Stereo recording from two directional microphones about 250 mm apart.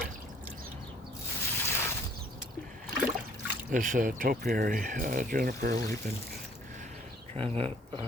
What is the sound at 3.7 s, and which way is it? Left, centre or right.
Speech, right.